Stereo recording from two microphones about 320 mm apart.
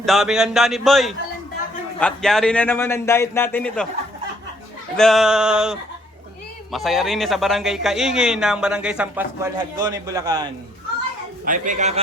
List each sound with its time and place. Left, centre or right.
0.0 s speech: centre
4.9 s speech: centre
11.4 s a man's voice: right